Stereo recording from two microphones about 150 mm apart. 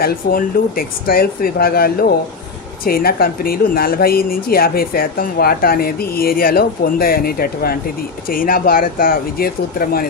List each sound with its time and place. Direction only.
0.0 s a woman's voice: 80° left
8.3 s speech: 70° left (ahead or behind)